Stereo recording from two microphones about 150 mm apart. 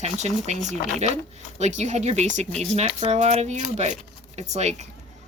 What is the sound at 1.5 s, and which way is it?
Speech, 50° right (ahead or behind).